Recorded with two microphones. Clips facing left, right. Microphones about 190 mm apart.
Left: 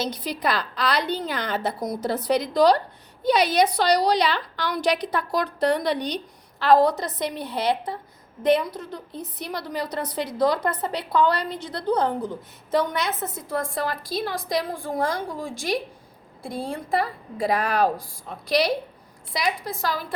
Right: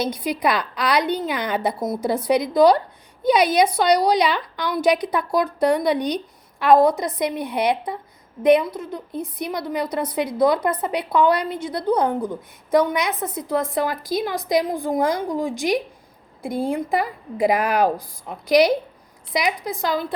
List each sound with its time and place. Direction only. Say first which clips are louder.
0.3 s a woman's voice: right 2 dB; 20° right (ahead or behind)
1.0 s a woman's voice: right 4 dB; 55° right (ahead or behind)
1.3 s a woman's voice: right 4 dB; 20° right (ahead or behind)